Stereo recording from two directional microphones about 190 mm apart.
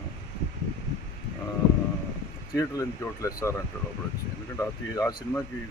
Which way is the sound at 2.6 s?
15° left (ahead or behind).